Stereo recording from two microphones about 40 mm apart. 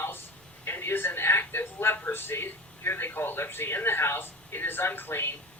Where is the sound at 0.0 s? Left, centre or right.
Left.